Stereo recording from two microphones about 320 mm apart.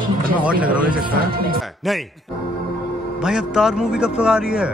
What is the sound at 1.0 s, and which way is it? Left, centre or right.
Speech, right.